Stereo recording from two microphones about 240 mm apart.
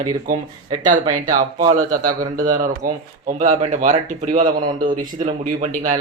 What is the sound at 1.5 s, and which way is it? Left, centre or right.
Speech, right.